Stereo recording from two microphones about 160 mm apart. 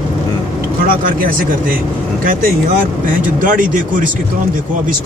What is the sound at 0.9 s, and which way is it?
Speech, 60° right (ahead or behind).